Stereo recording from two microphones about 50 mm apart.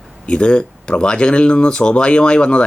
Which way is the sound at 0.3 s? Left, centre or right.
Centre.